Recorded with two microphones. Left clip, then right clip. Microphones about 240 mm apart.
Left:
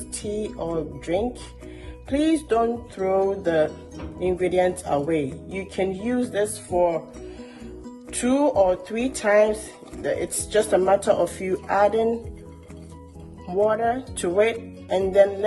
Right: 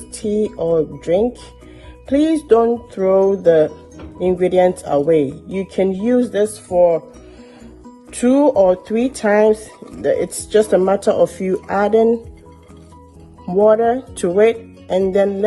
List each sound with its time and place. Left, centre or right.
0.2 s music: right
1.0 s speech: right
8.1 s speech: right
13.5 s speech: right